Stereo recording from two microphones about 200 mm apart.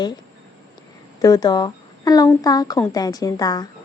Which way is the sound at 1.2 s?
20° left (ahead or behind).